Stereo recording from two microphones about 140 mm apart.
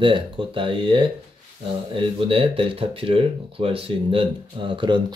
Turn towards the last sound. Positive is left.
turn(degrees=-35)  # may be behind; listen again after turning